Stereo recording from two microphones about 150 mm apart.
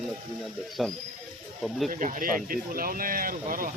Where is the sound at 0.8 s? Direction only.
Centre (ahead or behind).